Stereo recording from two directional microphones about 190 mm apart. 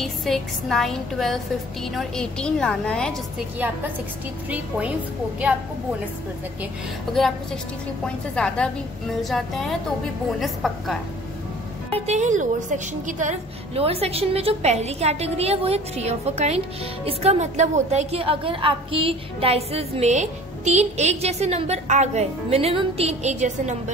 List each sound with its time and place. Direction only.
0.0 s a woman's voice: centre (ahead or behind)
3.5 s a woman's voice: 10° right (ahead or behind)
8.0 s a woman's voice: 5° left (ahead or behind)
11.9 s a woman's voice: 35° right (ahead or behind)